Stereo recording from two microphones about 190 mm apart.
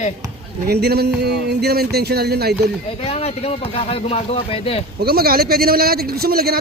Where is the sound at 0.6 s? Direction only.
60° right (ahead or behind).